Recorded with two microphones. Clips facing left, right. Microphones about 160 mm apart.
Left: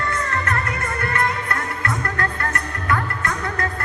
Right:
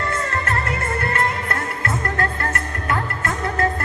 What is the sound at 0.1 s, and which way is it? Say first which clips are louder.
Music: even; 30° right (ahead or behind).